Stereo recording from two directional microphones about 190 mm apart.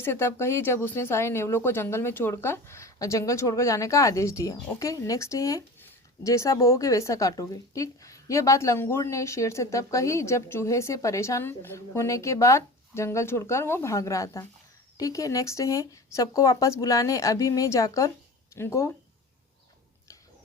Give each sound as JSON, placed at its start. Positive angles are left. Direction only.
{"t": 0.0, "sound": "speech", "side_deg": 10}